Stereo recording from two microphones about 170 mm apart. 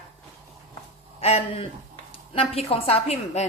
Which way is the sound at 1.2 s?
35° left (ahead or behind).